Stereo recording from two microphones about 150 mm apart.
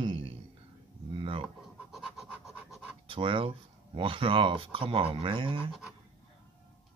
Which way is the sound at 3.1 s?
35° right (ahead or behind).